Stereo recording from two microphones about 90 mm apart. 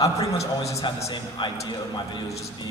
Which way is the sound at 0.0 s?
35° left (ahead or behind).